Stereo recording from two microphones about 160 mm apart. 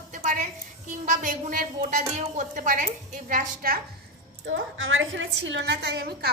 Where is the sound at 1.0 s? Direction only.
50° right (ahead or behind).